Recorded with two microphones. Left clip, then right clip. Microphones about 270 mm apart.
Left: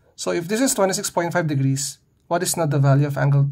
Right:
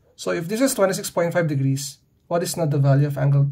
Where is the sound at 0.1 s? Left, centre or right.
Left.